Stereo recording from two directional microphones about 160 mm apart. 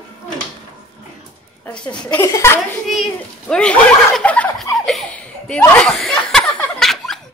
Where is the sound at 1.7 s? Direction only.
5° left (ahead or behind).